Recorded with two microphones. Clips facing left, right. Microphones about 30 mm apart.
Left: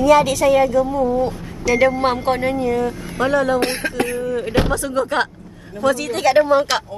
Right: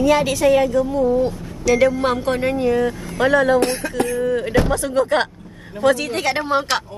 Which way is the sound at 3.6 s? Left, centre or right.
Left.